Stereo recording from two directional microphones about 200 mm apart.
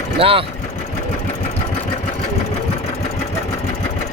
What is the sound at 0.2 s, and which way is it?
Speech, 25° right (ahead or behind).